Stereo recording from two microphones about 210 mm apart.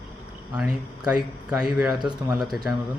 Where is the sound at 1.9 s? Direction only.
20° right (ahead or behind).